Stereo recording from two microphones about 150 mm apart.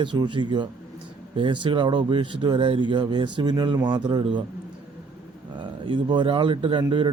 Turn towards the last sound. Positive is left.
turn(degrees=-30)  # may be behind; listen again after turning